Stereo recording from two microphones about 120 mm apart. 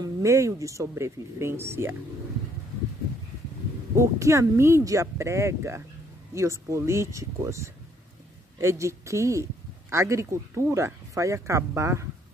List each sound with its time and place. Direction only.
0.0 s speech: 25° right (ahead or behind)
3.9 s speech: 25° right (ahead or behind)